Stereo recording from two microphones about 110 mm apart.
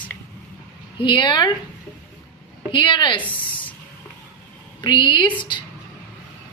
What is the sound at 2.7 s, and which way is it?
Speech, 45° left (ahead or behind).